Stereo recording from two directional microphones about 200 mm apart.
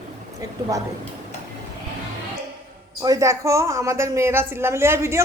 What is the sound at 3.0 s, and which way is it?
A woman's voice, 15° right (ahead or behind).